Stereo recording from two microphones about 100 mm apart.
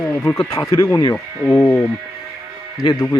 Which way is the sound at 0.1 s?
20° left (ahead or behind).